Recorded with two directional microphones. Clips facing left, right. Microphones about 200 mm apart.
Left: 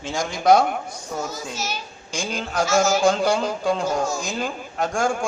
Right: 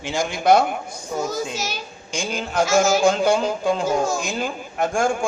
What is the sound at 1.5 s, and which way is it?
Speech, 90° right.